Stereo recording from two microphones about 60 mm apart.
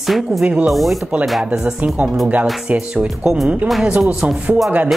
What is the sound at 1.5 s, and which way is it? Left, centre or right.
Speech, centre.